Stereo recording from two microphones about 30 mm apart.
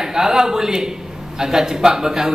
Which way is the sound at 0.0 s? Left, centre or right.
Centre.